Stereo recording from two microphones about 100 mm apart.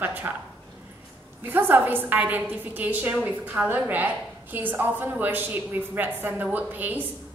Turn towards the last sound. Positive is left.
turn(degrees=-20)  # may be behind; listen again after turning